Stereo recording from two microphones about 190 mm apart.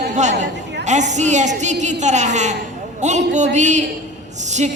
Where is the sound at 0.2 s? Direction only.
40° right (ahead or behind).